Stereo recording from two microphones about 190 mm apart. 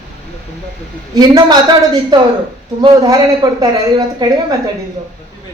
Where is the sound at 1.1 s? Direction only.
20° right (ahead or behind).